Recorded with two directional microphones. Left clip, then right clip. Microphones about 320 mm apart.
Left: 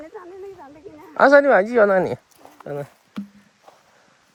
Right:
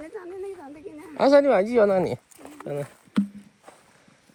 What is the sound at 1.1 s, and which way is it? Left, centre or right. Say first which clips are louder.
Speech: left 5 dB; left.